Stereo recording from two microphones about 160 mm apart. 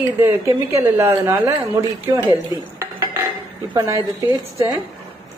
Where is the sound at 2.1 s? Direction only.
20° right (ahead or behind).